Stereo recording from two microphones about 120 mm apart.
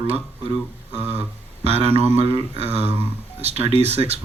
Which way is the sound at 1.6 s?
60° right (ahead or behind).